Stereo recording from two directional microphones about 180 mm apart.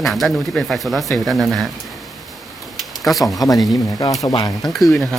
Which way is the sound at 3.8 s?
20° left (ahead or behind).